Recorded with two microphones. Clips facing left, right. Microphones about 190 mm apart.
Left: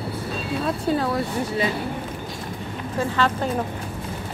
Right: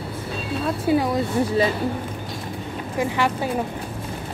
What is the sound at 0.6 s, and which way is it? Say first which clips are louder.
Speech: right 3 dB; 10° right (ahead or behind).